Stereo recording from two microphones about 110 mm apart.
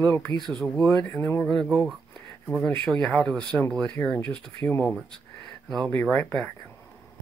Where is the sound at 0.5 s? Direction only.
5° left (ahead or behind).